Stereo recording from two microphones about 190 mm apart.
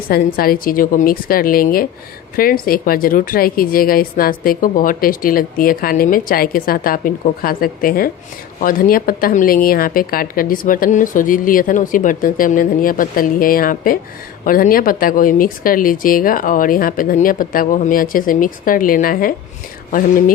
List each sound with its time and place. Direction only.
0.1 s a woman's voice: 50° left (ahead or behind)